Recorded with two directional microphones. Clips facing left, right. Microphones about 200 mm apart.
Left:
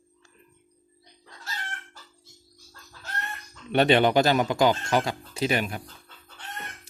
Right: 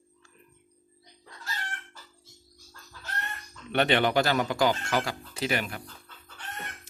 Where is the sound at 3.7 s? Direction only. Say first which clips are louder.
Left 4 dB; 20° left (ahead or behind).